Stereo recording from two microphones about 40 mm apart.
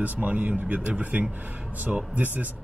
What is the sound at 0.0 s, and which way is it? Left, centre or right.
Speech, right.